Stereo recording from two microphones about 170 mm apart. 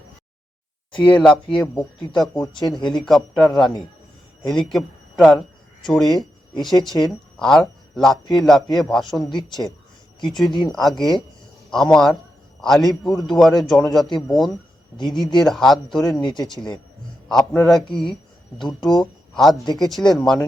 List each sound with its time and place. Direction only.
1.0 s speech: 5° left (ahead or behind)
2.3 s speech: 25° left (ahead or behind)
3.1 s speech: centre (ahead or behind)
10.2 s speech: centre (ahead or behind)
16.2 s speech: 25° left (ahead or behind)
16.5 s speech: 5° left (ahead or behind)